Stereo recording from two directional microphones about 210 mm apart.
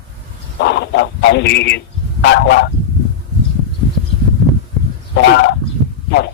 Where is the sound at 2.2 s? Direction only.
55° left (ahead or behind).